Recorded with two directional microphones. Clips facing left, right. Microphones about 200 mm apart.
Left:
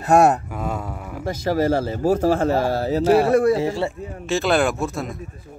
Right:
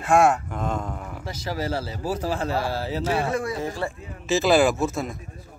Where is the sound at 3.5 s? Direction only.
25° left (ahead or behind).